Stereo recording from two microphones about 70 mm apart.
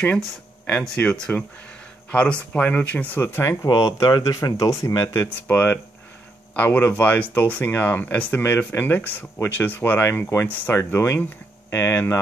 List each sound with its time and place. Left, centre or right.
0.8 s speech: centre; by 3.4 s left
3.6 s speech: left
5.5 s speech: left
10.5 s speech: left
10.8 s speech: left